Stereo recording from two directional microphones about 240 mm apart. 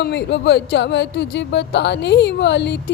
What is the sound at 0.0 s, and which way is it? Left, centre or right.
Speech, left.